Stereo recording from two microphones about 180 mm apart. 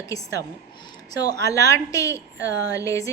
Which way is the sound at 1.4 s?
20° left (ahead or behind).